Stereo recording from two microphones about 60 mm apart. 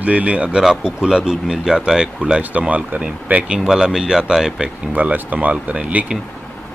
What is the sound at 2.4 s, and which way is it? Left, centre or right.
Speech, right.